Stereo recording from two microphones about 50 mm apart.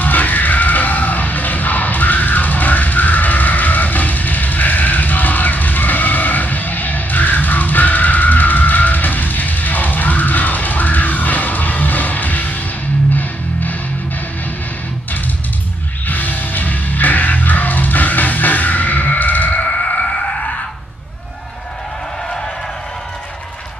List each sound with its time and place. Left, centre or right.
0.0 s music: left
16.1 s music: left